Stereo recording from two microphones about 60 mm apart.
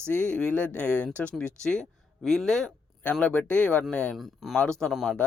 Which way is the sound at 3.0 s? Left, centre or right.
Left.